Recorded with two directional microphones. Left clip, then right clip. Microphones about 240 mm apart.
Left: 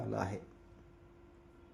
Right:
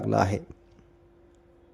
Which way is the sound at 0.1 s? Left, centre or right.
Right.